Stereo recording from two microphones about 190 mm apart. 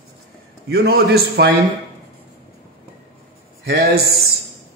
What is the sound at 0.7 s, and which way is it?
Speech, 60° right (ahead or behind).